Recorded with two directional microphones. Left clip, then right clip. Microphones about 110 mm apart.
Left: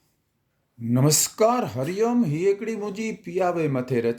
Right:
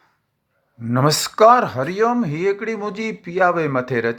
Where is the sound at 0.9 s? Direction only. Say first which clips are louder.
Right 4 dB; 20° left (ahead or behind).